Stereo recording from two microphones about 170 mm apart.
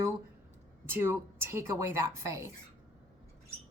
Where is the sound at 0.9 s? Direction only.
15° right (ahead or behind).